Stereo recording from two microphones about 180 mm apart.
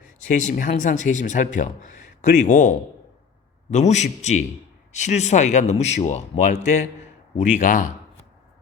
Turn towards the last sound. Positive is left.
turn(degrees=45)  # may be behind; listen again after turning